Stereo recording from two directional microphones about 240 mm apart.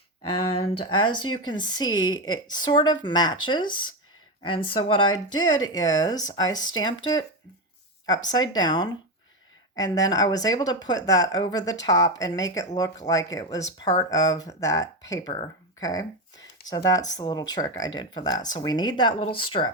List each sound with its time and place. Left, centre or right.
0.8 s speech: left